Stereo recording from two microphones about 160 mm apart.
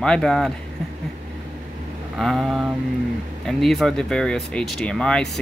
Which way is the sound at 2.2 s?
Centre (ahead or behind).